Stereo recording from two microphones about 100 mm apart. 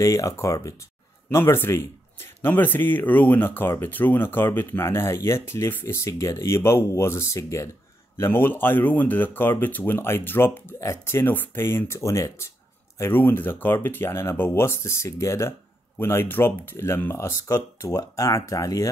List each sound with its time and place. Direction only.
0.0 s speech: 30° left (ahead or behind)